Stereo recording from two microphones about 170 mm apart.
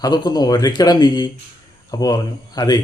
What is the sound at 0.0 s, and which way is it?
Speech, 25° left (ahead or behind).